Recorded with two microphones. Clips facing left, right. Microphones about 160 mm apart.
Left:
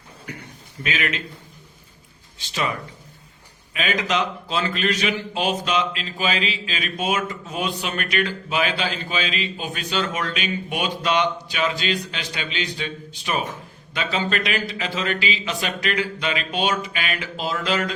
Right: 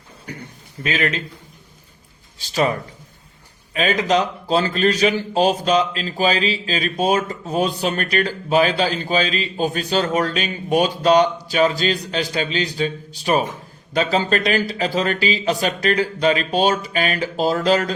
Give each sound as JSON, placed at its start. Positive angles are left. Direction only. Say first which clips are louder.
{"t": 0.8, "sound": "speech", "louder": "right 4 dB", "side_deg": -35}
{"t": 2.4, "sound": "speech", "louder": "right 7 dB", "side_deg": -35}
{"t": 3.8, "sound": "speech", "louder": "right 5 dB", "side_deg": -35}